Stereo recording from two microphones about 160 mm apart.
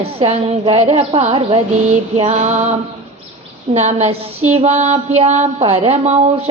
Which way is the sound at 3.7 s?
45° right (ahead or behind).